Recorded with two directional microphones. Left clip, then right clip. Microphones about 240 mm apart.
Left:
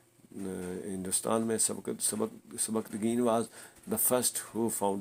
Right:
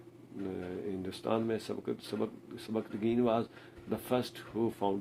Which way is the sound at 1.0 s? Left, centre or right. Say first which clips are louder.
Left 3 dB; left.